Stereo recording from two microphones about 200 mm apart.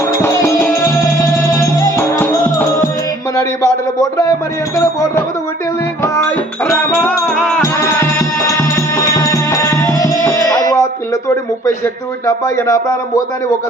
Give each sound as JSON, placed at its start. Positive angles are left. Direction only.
{"t": 0.2, "sound": "music", "side_deg": 10}
{"t": 1.8, "sound": "music", "side_deg": 10}
{"t": 3.3, "sound": "a man's voice", "side_deg": 15}
{"t": 4.8, "sound": "a sound", "side_deg": 15}
{"t": 6.7, "sound": "music", "side_deg": 10}
{"t": 8.4, "sound": "music", "side_deg": 15}
{"t": 12.2, "sound": "a sound", "side_deg": 15}